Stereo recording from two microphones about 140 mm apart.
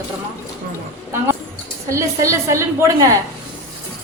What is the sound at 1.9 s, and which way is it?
A woman's voice, 20° right (ahead or behind).